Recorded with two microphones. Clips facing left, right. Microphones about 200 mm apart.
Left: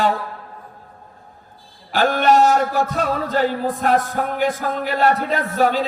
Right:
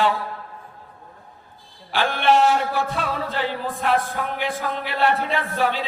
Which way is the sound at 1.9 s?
45° left (ahead or behind).